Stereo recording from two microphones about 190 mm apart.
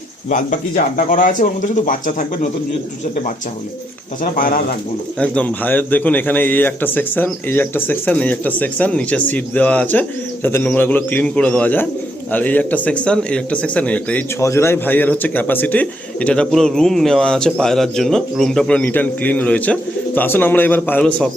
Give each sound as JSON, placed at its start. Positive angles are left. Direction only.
{"t": 0.3, "sound": "speech", "side_deg": 40}
{"t": 4.2, "sound": "speech", "side_deg": 45}
{"t": 5.2, "sound": "a man's voice", "side_deg": 5}